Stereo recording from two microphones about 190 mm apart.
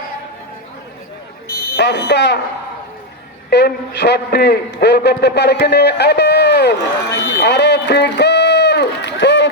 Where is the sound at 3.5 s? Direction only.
60° left (ahead or behind).